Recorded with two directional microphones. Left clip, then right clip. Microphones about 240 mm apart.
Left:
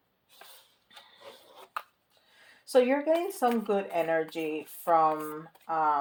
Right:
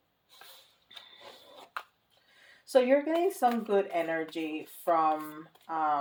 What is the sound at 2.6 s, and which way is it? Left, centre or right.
Speech, left.